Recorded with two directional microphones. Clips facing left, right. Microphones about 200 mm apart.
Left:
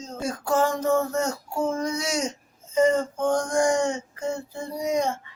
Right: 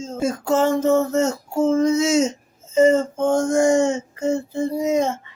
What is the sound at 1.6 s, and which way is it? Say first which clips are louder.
Speech: right 10 dB; 25° right (ahead or behind).